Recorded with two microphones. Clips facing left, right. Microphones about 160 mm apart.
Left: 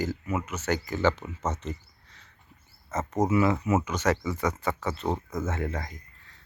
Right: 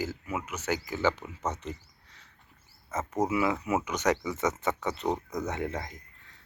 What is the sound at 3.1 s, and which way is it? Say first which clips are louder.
Speech: left 4 dB; 10° right (ahead or behind).